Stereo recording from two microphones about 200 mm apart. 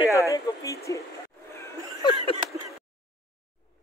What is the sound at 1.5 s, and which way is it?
Laughter, 15° left (ahead or behind).